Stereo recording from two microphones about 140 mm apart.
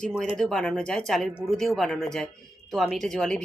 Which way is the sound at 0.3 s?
5° left (ahead or behind).